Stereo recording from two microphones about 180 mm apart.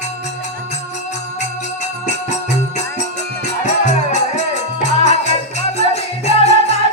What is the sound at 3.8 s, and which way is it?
Music, 40° left (ahead or behind).